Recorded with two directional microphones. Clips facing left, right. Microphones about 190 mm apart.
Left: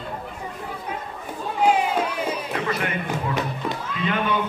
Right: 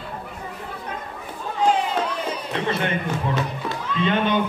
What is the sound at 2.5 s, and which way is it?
Speech, 25° right (ahead or behind).